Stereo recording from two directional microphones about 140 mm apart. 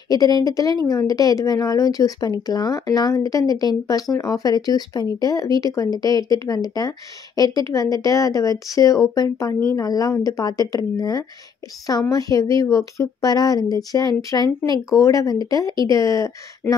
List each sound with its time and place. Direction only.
0.1 s speech: 25° left (ahead or behind)